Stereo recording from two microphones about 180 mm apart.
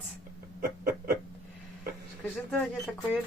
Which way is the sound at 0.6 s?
55° right (ahead or behind).